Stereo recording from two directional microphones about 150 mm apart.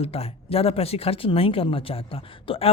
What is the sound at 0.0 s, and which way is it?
A woman's voice, 40° left (ahead or behind).